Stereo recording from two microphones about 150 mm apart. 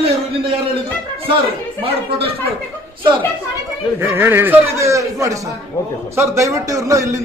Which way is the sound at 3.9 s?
15° right (ahead or behind).